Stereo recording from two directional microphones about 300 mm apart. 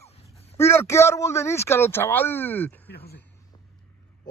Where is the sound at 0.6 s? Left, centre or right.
Centre.